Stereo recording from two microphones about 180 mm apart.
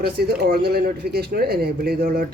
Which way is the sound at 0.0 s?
60° right (ahead or behind).